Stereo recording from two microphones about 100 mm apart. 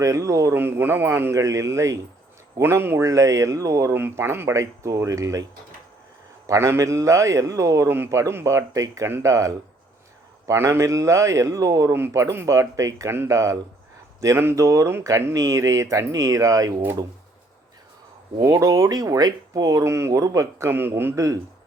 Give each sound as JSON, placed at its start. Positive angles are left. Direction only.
{"t": 0.0, "sound": "speech", "side_deg": -30}
{"t": 6.5, "sound": "speech", "side_deg": -30}
{"t": 18.3, "sound": "speech", "side_deg": -40}